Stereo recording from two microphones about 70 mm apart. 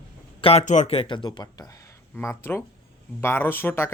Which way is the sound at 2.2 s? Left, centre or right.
Left.